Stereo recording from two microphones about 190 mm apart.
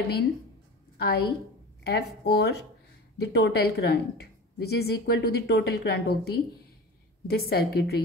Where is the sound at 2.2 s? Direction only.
60° left (ahead or behind).